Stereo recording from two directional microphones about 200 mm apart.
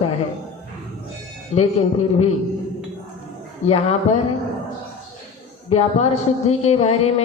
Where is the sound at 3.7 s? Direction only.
30° left (ahead or behind).